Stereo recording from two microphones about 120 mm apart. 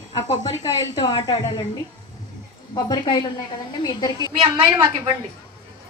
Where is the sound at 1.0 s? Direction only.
40° left (ahead or behind).